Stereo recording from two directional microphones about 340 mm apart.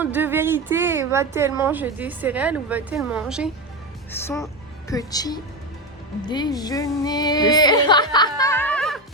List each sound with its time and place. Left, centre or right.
0.0 s a woman's voice: centre